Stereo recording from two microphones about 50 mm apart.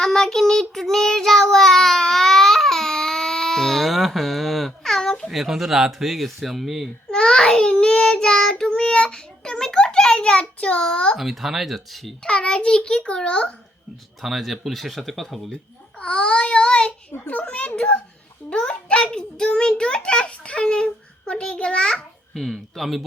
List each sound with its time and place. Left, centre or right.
0.0 s child singing: centre
5.3 s speech: centre
7.1 s child singing: centre
11.2 s speech: centre
12.2 s a child's voice: centre
14.2 s speech: centre
16.0 s a child's voice: left
17.1 s a child's voice: left
22.4 s speech: centre